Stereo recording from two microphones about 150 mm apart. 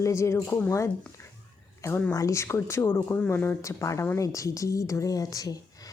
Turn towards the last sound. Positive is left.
turn(degrees=25)  # may be behind; listen again after turning